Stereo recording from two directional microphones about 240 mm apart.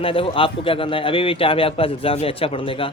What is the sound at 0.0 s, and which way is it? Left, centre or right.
Speech, left.